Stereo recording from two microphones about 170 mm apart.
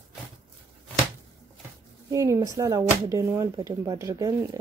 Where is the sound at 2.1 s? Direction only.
20° right (ahead or behind).